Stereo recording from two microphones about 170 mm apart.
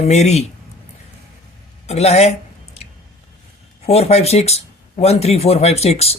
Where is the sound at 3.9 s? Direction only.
40° left (ahead or behind).